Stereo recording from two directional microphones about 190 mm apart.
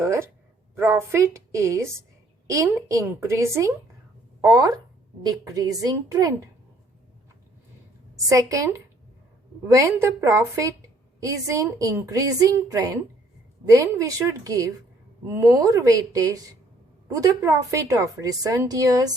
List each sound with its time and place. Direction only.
0.0 s a woman's voice: 15° right (ahead or behind)
8.1 s a woman's voice: 15° right (ahead or behind)